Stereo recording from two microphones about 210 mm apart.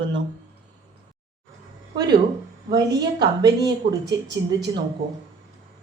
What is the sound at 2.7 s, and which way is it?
A woman's voice, 20° right (ahead or behind).